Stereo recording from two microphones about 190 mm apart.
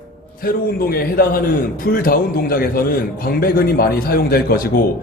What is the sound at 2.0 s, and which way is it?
A man's voice, 50° left (ahead or behind).